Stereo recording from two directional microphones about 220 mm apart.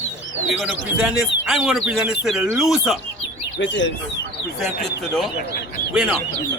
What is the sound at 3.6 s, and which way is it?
Speech, 55° left (ahead or behind).